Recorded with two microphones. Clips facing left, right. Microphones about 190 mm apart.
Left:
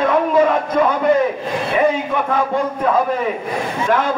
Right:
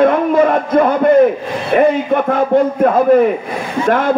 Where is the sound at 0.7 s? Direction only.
50° right (ahead or behind).